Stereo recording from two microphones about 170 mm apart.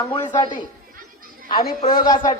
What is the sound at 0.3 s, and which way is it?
Speech, 25° left (ahead or behind).